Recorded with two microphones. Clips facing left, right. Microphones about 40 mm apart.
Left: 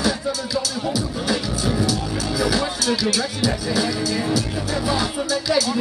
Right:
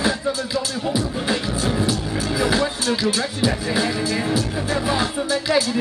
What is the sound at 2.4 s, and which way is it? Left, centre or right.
Music, right.